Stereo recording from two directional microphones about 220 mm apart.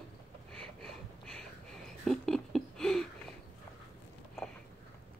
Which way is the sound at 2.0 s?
Centre (ahead or behind).